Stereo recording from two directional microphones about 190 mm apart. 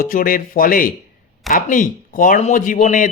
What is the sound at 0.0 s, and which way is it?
Speech, 50° left (ahead or behind).